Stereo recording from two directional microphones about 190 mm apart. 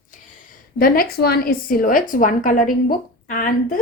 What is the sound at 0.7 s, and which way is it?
Speech, 50° left (ahead or behind).